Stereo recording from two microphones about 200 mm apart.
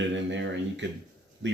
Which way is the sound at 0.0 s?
65° right (ahead or behind).